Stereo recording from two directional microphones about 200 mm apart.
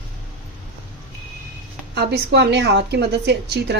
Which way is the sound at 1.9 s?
55° right (ahead or behind).